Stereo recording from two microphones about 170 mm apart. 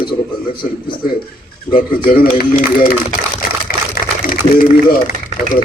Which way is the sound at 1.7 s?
55° left (ahead or behind).